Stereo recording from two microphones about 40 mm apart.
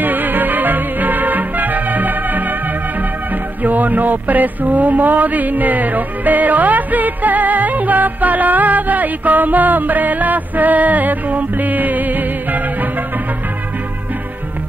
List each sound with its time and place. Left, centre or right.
0.0 s music: right
3.6 s mantra: right